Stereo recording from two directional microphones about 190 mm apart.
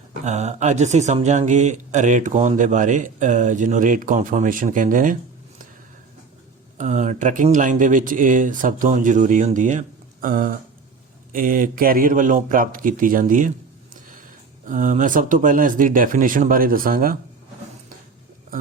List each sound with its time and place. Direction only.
0.3 s speech: 35° right (ahead or behind)
6.7 s speech: 40° right (ahead or behind)
14.7 s speech: 45° right (ahead or behind)